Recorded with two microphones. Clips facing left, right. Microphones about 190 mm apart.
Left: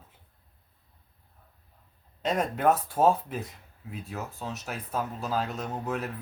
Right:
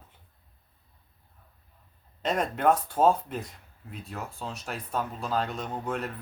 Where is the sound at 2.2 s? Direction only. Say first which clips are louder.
Even; 5° left (ahead or behind).